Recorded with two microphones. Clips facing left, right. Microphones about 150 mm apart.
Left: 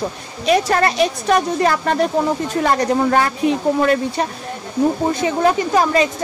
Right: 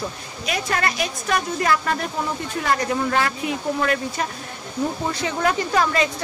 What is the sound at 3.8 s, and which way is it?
Speech, 30° left (ahead or behind).